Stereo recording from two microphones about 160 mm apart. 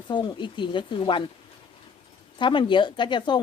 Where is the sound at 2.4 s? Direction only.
30° left (ahead or behind).